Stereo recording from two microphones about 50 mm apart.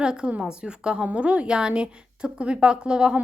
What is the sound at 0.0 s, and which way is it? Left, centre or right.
A woman's voice, centre.